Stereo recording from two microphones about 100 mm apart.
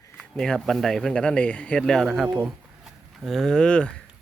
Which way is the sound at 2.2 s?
20° right (ahead or behind).